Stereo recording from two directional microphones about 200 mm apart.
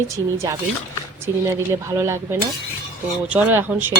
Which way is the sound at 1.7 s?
15° right (ahead or behind).